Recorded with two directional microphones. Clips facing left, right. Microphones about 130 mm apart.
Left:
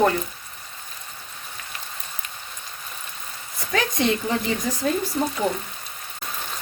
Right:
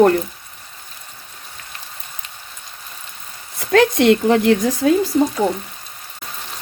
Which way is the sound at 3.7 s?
70° right (ahead or behind).